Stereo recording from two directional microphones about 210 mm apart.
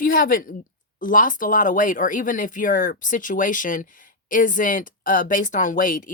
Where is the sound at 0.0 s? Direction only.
40° left (ahead or behind).